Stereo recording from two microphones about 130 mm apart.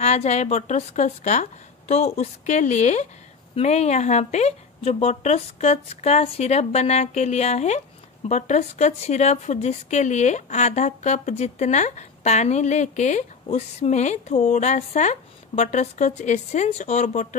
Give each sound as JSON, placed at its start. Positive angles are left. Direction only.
{"t": 0.0, "sound": "speech", "side_deg": 60}